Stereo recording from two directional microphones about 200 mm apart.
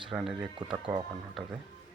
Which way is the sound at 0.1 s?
Centre (ahead or behind).